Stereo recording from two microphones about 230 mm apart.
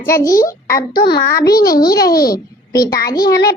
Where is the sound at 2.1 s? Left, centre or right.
Left.